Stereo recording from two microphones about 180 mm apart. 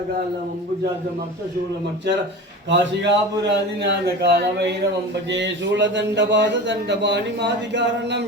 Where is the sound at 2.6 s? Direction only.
80° right.